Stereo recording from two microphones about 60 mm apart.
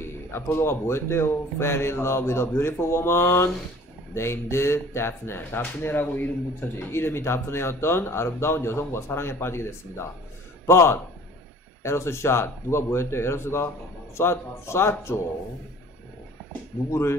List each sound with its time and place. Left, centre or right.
0.0 s speech: left
16.9 s speech: left